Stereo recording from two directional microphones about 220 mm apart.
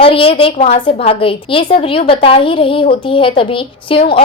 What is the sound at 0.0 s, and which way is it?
A woman's voice, 25° left (ahead or behind).